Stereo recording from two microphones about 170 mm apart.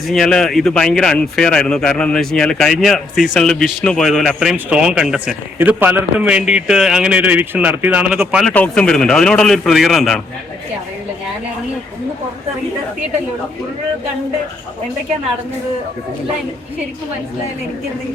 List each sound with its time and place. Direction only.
0.1 s a man's voice: 5° left (ahead or behind)
8.4 s a man's voice: 5° left (ahead or behind)